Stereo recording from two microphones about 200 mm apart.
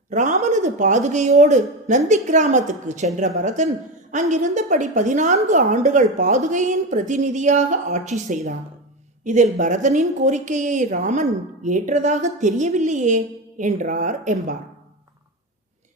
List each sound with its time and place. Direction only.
0.1 s a woman's voice: 35° right (ahead or behind)